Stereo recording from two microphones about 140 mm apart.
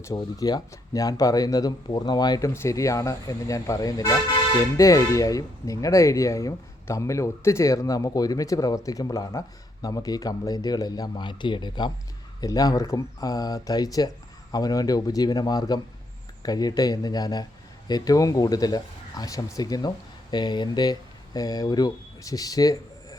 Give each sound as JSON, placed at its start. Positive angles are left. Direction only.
{"t": 0.2, "sound": "speech", "side_deg": 30}